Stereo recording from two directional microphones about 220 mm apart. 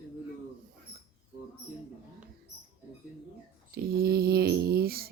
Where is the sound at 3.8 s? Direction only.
45° right (ahead or behind).